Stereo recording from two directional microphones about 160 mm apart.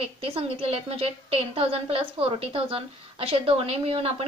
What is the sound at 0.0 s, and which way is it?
A woman's voice, 35° right (ahead or behind).